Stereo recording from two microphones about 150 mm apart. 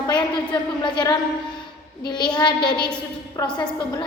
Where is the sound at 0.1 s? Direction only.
30° left (ahead or behind).